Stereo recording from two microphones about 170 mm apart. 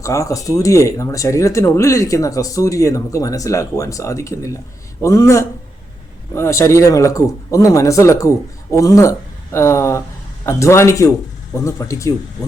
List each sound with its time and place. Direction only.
0.0 s a man's voice: 20° left (ahead or behind)